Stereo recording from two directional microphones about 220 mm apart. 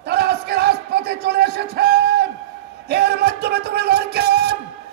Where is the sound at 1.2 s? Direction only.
45° right (ahead or behind).